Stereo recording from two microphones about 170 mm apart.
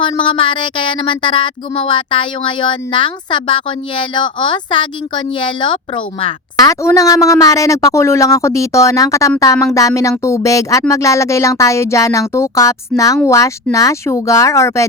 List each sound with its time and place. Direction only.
0.0 s speech: 30° left (ahead or behind)
6.7 s speech: 20° left (ahead or behind)